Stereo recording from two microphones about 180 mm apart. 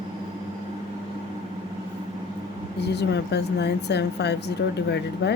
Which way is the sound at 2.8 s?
70° left (ahead or behind).